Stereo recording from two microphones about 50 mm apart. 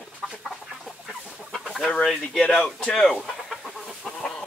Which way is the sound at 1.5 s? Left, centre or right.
Centre.